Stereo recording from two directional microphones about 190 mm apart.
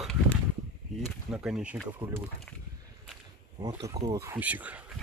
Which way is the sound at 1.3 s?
5° right (ahead or behind).